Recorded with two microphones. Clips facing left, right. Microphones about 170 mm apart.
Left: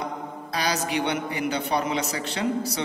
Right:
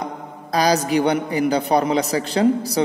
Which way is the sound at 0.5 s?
40° right (ahead or behind).